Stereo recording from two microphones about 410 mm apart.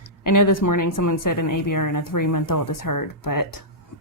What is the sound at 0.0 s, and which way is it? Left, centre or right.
Speech, left.